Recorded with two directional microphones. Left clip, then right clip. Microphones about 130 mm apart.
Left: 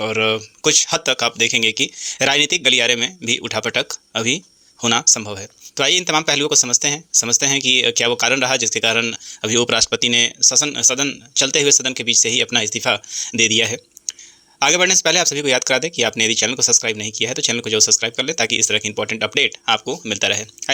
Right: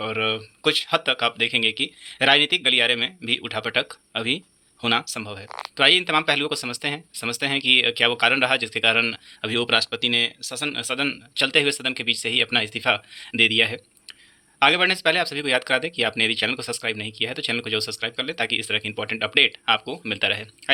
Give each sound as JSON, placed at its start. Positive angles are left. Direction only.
{"t": 0.0, "sound": "speech", "side_deg": 40}